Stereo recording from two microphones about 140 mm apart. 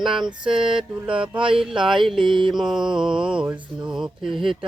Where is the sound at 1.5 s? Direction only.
5° right (ahead or behind).